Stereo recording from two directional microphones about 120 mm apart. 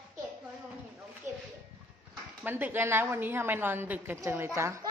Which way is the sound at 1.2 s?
20° right (ahead or behind).